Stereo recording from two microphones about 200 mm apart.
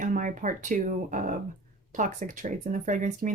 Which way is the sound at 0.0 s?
40° right (ahead or behind).